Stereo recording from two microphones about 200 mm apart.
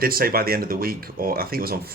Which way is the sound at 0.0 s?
45° right (ahead or behind).